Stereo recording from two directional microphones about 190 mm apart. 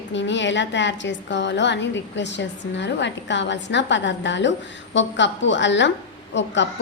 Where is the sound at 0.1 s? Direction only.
70° left (ahead or behind).